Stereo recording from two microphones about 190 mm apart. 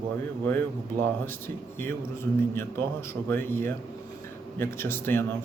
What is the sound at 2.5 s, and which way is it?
Speech, 10° left (ahead or behind).